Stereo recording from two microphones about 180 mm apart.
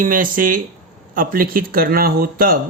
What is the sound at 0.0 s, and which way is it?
Speech, 50° right (ahead or behind).